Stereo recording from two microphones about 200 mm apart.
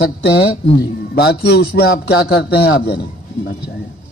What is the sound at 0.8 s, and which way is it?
A man's voice, 55° left (ahead or behind).